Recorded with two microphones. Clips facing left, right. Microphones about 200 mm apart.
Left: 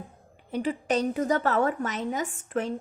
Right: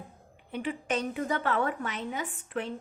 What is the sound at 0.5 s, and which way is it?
A woman's voice, 40° left (ahead or behind).